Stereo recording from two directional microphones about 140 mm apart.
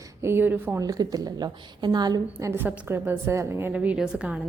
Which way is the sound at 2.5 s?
15° right (ahead or behind).